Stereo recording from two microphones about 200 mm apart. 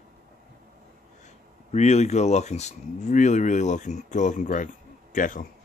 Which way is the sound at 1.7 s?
35° left (ahead or behind).